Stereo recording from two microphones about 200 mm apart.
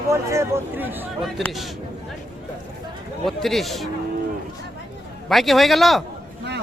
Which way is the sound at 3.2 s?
Centre (ahead or behind).